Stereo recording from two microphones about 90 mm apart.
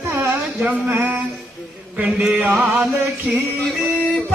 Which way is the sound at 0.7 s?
20° right (ahead or behind).